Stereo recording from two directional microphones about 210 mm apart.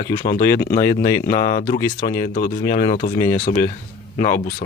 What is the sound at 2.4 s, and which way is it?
Speech, 45° left (ahead or behind).